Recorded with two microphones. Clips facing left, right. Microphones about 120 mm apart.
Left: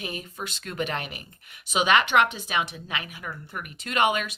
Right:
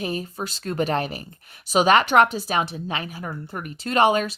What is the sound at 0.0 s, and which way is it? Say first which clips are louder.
Speech: right 7 dB; 35° right (ahead or behind).